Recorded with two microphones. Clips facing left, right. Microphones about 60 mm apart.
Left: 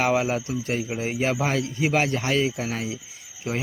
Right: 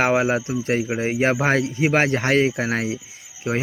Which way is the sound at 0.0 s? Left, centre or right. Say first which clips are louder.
Right 4 dB; right.